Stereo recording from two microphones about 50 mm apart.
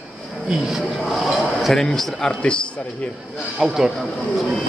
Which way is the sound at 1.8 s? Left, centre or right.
Centre.